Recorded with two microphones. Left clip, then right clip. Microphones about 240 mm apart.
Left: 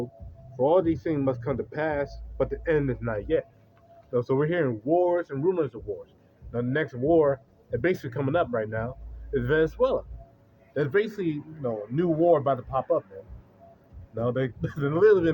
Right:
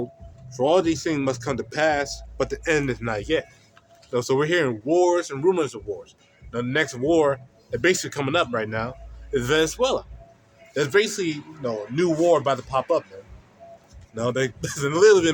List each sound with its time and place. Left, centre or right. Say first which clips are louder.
0.6 s speech: right 2 dB; right
14.2 s speech: right 3 dB; centre